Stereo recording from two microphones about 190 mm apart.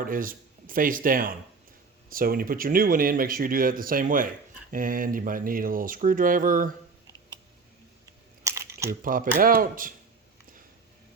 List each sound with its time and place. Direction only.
0.0 s a man's voice: 45° right (ahead or behind)
8.4 s a sound: 15° right (ahead or behind)
9.0 s speech: 45° right (ahead or behind)